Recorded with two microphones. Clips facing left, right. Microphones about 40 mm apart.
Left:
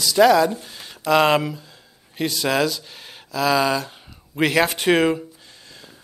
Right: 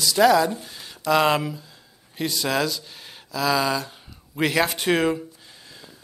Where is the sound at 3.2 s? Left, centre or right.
Centre.